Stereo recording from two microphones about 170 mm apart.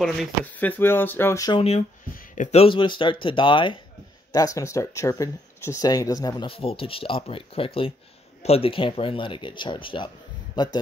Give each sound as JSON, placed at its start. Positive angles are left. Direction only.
{"t": 0.0, "sound": "speech", "side_deg": 5}
{"t": 1.6, "sound": "speech", "side_deg": 35}
{"t": 2.1, "sound": "speech", "side_deg": 45}